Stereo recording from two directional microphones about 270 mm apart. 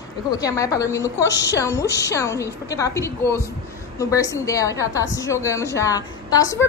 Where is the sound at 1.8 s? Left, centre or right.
Left.